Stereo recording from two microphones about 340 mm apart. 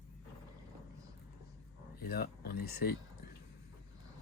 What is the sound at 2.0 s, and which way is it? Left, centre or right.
Speech, left.